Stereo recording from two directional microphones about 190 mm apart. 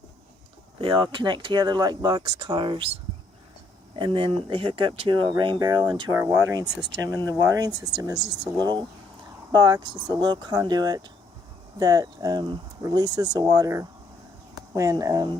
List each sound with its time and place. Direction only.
0.8 s speech: 25° right (ahead or behind)
3.9 s speech: 25° right (ahead or behind)